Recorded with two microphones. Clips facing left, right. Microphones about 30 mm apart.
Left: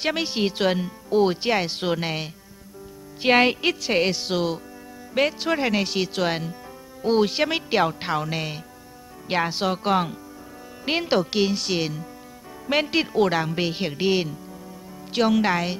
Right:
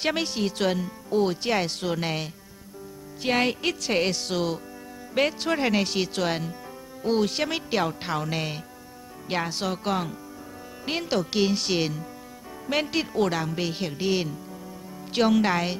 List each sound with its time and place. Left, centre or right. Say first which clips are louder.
0.0 s speech: left 1 dB; centre
0.3 s a woman's voice: left 3 dB; left; by 2.3 s centre
3.2 s speech: left 6 dB; left; by 8.6 s centre
9.3 s a woman's voice: left 4 dB; centre
11.4 s speech: even; centre
12.6 s a woman's voice: left 4 dB; centre
14.1 s speech: left 3 dB; centre